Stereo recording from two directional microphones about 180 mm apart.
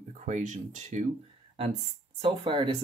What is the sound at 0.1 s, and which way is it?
Speech, 45° right (ahead or behind).